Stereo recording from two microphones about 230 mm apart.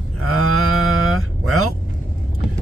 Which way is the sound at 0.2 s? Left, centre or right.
Right.